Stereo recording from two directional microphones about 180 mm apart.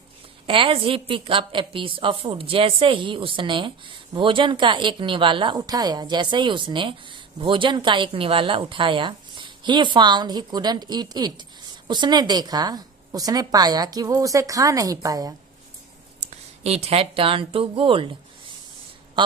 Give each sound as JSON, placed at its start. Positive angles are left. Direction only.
{"t": 0.4, "sound": "a woman's voice", "side_deg": -30}
{"t": 16.6, "sound": "speech", "side_deg": -35}